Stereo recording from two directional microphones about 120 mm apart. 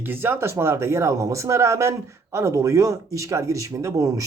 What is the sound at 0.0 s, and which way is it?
Speech, 20° right (ahead or behind).